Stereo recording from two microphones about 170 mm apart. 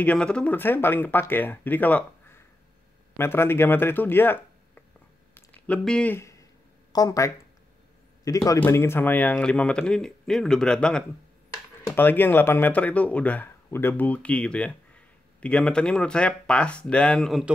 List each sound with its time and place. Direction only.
0.0 s speech: 5° left (ahead or behind)
5.3 s a sound: 10° left (ahead or behind)
6.9 s a man's voice: 20° left (ahead or behind); by 17.5 s centre (ahead or behind)